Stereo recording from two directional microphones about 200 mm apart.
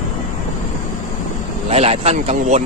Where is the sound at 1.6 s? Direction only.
30° right (ahead or behind).